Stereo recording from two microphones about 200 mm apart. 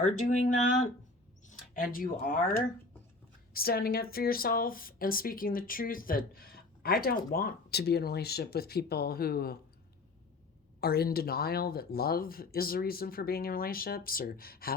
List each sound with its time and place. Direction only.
0.3 s speech: 40° left (ahead or behind)
3.5 s speech: 50° left (ahead or behind)
10.8 s speech: 50° left (ahead or behind)